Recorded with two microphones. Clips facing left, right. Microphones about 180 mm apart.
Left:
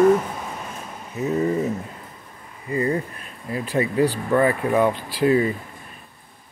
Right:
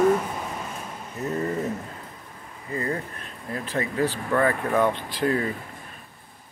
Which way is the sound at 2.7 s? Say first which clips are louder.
Left 6 dB; 15° left (ahead or behind).